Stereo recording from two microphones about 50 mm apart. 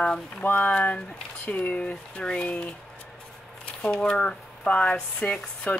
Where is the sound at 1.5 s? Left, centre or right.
Left.